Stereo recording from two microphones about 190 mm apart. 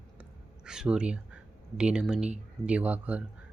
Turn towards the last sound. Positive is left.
turn(degrees=-5)  # may be behind; listen again after turning